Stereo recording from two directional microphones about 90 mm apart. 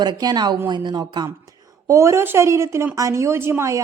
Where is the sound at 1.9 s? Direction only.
30° right (ahead or behind).